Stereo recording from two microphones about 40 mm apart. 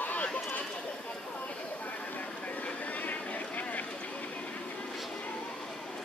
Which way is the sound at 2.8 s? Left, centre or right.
Left.